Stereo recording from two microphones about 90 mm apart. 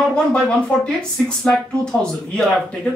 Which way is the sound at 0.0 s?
10° left (ahead or behind).